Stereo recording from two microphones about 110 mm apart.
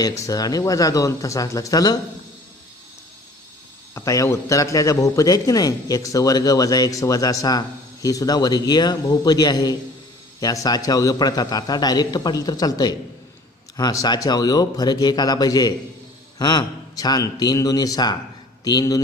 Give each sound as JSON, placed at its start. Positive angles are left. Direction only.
{"t": 0.0, "sound": "a man's voice", "side_deg": 30}
{"t": 3.9, "sound": "a man's voice", "side_deg": 30}